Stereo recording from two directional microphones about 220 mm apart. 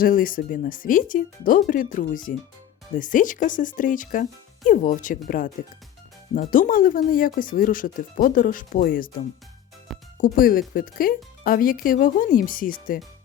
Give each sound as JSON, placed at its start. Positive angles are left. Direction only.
{"t": 0.0, "sound": "speech", "side_deg": 40}
{"t": 10.2, "sound": "speech", "side_deg": 40}